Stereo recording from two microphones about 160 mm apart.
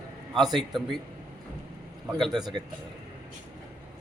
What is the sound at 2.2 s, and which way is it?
Speech, centre (ahead or behind).